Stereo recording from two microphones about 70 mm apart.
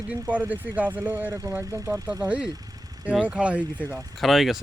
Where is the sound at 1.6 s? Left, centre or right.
Right.